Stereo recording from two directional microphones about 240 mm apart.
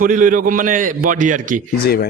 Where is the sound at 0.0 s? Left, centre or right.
Right.